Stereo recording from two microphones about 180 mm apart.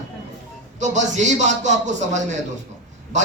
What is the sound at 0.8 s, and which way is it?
Speech, 40° right (ahead or behind).